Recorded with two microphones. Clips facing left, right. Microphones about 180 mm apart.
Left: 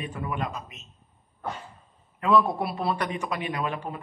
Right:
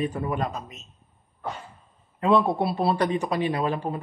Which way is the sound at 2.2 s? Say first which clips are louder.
Right 2 dB; 30° right (ahead or behind).